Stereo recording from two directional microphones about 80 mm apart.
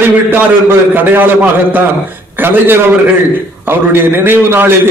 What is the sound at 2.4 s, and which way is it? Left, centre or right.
Speech, right.